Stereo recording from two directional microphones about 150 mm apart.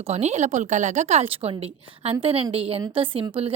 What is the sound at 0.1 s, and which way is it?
A woman's voice, 50° right (ahead or behind).